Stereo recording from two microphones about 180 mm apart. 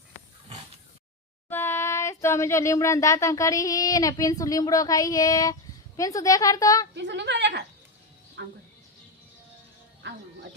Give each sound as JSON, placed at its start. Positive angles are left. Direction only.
{"t": 1.5, "sound": "a woman's voice", "side_deg": 10}
{"t": 6.9, "sound": "a woman's voice", "side_deg": -75}